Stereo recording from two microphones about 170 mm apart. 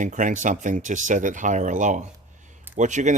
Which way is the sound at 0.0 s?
50° right (ahead or behind).